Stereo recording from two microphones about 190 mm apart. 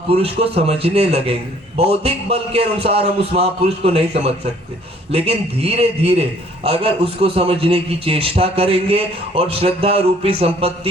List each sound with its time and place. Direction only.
0.1 s a man's voice: 30° right (ahead or behind)